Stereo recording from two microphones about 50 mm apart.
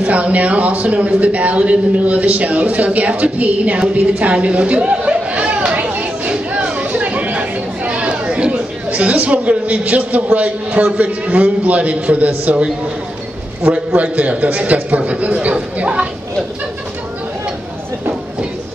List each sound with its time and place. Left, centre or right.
0.0 s a man's voice: right
5.7 s a sound: right
6.3 s chatter: right
13.7 s a man's voice: right